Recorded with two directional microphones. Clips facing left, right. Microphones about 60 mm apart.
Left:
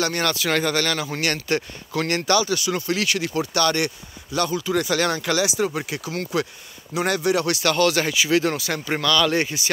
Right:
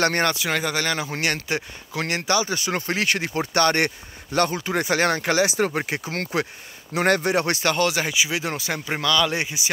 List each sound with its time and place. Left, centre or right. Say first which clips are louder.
0.2 s speech: right 1 dB; right
0.5 s speech: left 2 dB; centre
2.5 s speech: left 2 dB; right
8.8 s speech: left 1 dB; centre